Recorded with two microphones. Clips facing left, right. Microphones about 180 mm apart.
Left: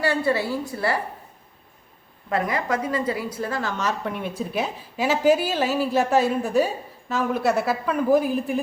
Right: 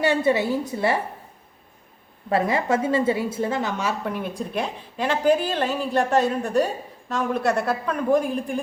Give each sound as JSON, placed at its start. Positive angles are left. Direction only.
{"t": 0.0, "sound": "a woman's voice", "side_deg": -20}
{"t": 2.3, "sound": "a woman's voice", "side_deg": -25}
{"t": 4.0, "sound": "speech", "side_deg": 0}